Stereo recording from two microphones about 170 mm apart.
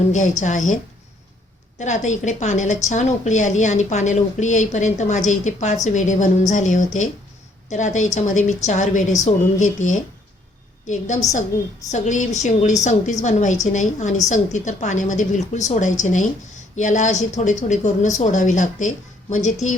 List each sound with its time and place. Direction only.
0.1 s a woman's voice: 45° left (ahead or behind)
1.8 s a woman's voice: 45° left (ahead or behind)